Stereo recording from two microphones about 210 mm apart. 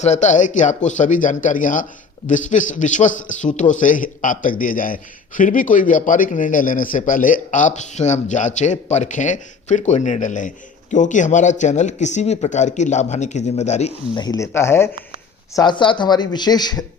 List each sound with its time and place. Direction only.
0.0 s speech: 35° left (ahead or behind)
14.2 s speech: 15° left (ahead or behind)
15.5 s speech: 20° left (ahead or behind)